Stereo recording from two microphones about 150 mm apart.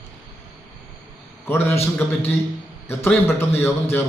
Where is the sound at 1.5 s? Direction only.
15° left (ahead or behind).